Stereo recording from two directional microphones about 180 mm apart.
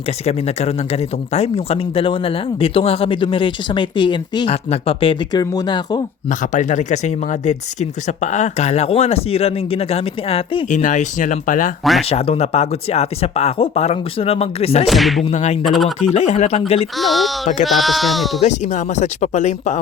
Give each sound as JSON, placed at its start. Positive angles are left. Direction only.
{"t": 0.3, "sound": "speech", "side_deg": 35}
{"t": 6.4, "sound": "speech", "side_deg": 45}
{"t": 12.0, "sound": "speech", "side_deg": 35}
{"t": 14.8, "sound": "speech", "side_deg": 0}
{"t": 15.2, "sound": "speech", "side_deg": 40}
{"t": 15.6, "sound": "speech", "side_deg": 0}
{"t": 16.1, "sound": "speech", "side_deg": 40}
{"t": 17.0, "sound": "speech", "side_deg": 0}
{"t": 18.4, "sound": "speech", "side_deg": 40}